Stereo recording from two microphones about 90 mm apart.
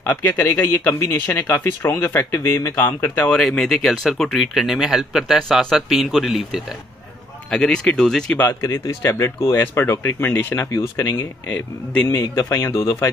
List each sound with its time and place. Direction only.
0.0 s speech: 20° left (ahead or behind)
3.3 s speech: 5° left (ahead or behind)
7.5 s speech: 10° left (ahead or behind)
8.4 s speech: 30° left (ahead or behind)